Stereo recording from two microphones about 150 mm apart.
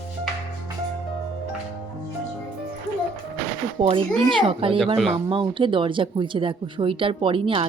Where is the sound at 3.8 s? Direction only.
40° right (ahead or behind).